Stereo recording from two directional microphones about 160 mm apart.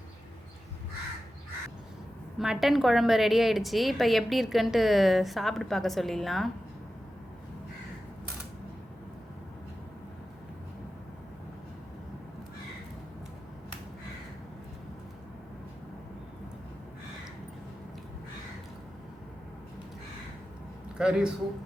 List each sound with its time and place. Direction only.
2.4 s a woman's voice: centre (ahead or behind)
21.0 s a man's voice: 5° right (ahead or behind)